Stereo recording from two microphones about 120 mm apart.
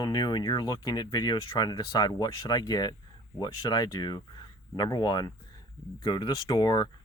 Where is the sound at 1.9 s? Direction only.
30° left (ahead or behind).